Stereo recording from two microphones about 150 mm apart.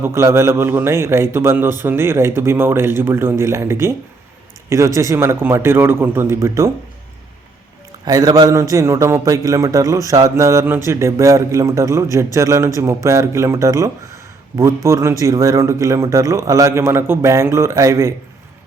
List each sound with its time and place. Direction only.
0.0 s a man's voice: 15° right (ahead or behind)
4.9 s a man's voice: 20° right (ahead or behind)
8.0 s a man's voice: 25° right (ahead or behind)